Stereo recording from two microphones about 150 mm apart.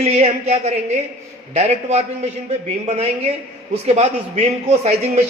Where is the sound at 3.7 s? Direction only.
45° right (ahead or behind).